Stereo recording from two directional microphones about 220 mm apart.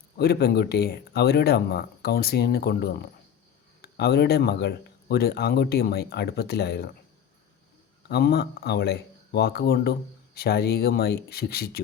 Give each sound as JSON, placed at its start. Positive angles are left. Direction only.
{"t": 0.2, "sound": "speech", "side_deg": 45}
{"t": 8.0, "sound": "speech", "side_deg": 45}